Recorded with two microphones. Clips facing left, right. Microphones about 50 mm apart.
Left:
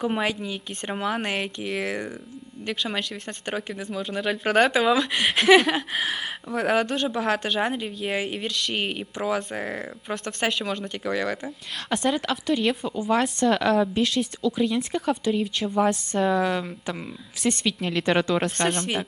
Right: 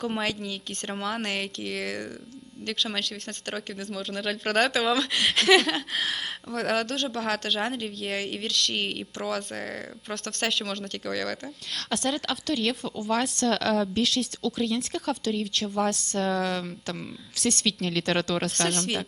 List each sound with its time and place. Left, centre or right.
0.0 s speech: centre